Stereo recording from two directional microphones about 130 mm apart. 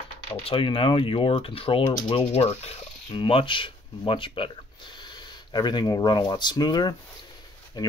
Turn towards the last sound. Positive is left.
turn(degrees=30)  # may be behind; listen again after turning